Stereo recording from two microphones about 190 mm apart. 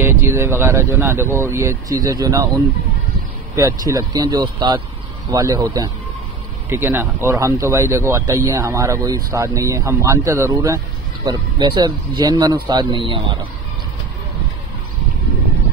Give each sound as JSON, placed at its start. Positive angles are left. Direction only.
{"t": 0.0, "sound": "speech", "side_deg": -15}
{"t": 3.5, "sound": "speech", "side_deg": -15}